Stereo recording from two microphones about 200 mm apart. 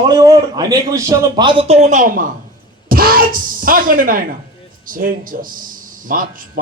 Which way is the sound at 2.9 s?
50° right (ahead or behind).